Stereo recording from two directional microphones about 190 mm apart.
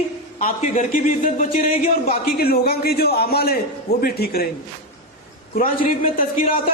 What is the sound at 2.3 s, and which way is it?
A man's voice, 50° left (ahead or behind).